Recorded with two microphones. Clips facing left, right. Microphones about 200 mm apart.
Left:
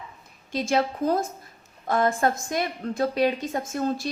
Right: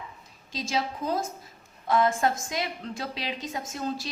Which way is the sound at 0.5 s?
60° left (ahead or behind).